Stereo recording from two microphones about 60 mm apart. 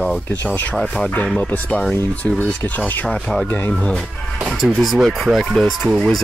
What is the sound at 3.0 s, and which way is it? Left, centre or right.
Cutlery, centre.